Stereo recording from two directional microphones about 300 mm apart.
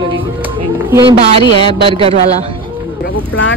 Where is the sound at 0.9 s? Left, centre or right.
Centre.